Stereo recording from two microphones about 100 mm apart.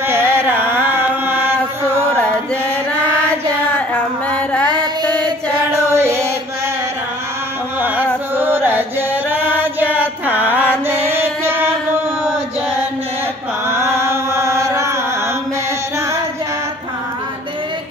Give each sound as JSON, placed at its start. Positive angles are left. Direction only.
{"t": 0.0, "sound": "chant", "side_deg": -25}
{"t": 2.0, "sound": "music", "side_deg": 15}
{"t": 4.3, "sound": "music", "side_deg": 10}
{"t": 5.9, "sound": "a sound", "side_deg": -25}
{"t": 8.4, "sound": "chant", "side_deg": -20}
{"t": 10.2, "sound": "music", "side_deg": -20}
{"t": 10.9, "sound": "a sound", "side_deg": -25}
{"t": 13.7, "sound": "chant", "side_deg": -30}